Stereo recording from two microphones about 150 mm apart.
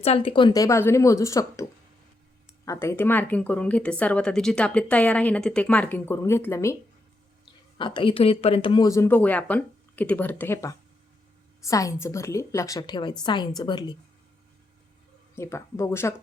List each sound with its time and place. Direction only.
0.0 s a woman's voice: 40° left (ahead or behind); by 1.6 s 20° left (ahead or behind)
2.6 s speech: 15° left (ahead or behind)
7.8 s speech: 35° left (ahead or behind)
8.9 s a woman's voice: 15° left (ahead or behind)
15.4 s speech: 20° left (ahead or behind)